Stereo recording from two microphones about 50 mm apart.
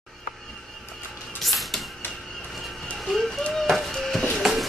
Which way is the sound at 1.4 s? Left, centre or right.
Centre.